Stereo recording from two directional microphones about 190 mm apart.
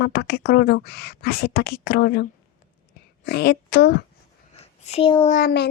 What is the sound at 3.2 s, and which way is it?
Speech, 55° left (ahead or behind).